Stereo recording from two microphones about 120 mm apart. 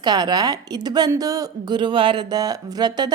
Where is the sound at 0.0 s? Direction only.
35° right (ahead or behind).